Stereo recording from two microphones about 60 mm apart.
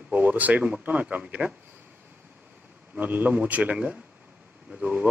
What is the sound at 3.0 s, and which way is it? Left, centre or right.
A man's voice, right.